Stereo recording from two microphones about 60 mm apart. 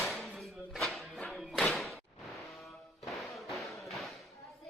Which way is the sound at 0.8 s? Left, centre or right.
Centre.